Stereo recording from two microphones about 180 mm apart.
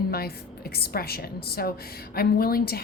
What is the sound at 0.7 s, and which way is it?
A woman's voice, 60° left (ahead or behind).